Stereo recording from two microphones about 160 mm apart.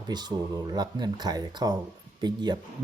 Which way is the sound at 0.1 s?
25° right (ahead or behind).